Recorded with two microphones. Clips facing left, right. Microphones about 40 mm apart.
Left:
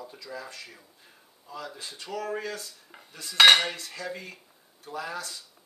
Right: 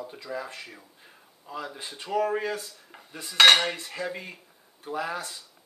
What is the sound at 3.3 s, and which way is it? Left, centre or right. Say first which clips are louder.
Cutlery: even; centre.